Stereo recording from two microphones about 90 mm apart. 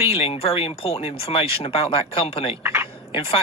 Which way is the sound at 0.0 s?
90° left.